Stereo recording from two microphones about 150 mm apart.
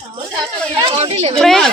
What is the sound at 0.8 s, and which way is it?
Speech, 35° right (ahead or behind).